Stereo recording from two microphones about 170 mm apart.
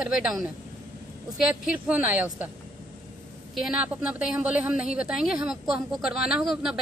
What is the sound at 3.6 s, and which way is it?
A woman's voice, 5° right (ahead or behind).